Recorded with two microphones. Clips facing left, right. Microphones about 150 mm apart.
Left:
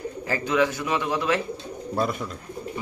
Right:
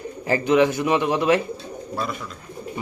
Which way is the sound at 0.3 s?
20° right (ahead or behind).